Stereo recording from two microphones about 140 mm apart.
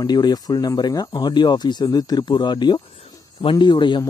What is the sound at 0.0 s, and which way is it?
Speech, 30° left (ahead or behind).